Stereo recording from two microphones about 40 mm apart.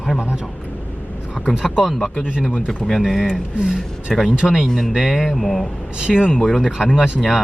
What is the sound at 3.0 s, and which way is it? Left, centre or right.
Speech, centre.